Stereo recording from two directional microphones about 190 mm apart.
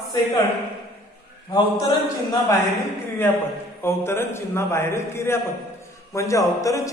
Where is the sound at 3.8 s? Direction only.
15° left (ahead or behind).